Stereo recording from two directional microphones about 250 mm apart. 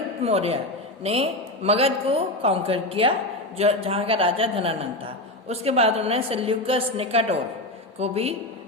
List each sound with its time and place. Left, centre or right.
0.2 s a woman's voice: right